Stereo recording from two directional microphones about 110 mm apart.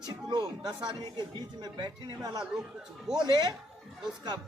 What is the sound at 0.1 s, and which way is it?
Speech, 40° right (ahead or behind).